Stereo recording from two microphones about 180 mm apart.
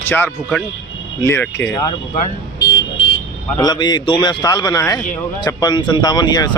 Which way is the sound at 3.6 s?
25° left (ahead or behind).